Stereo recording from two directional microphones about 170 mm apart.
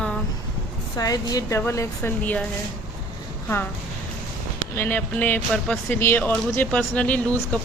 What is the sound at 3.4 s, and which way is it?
Speech, 10° left (ahead or behind).